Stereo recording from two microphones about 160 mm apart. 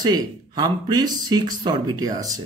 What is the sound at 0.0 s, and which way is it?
A man's voice, 25° right (ahead or behind).